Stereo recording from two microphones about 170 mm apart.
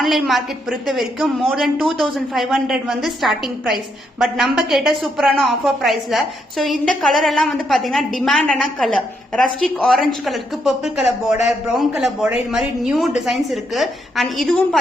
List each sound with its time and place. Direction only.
0.0 s a woman's voice: centre (ahead or behind)